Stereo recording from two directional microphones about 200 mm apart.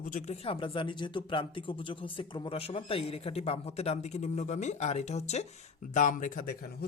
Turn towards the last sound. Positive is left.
turn(degrees=50)  # may be behind; listen again after turning